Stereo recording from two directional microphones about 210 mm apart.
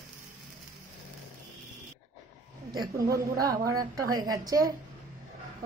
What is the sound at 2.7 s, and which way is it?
A woman's voice, 20° right (ahead or behind).